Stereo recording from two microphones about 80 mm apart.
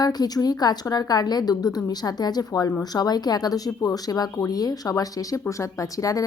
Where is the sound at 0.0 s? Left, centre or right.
Left.